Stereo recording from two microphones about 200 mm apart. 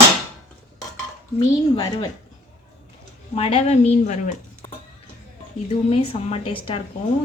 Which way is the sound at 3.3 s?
30° left (ahead or behind).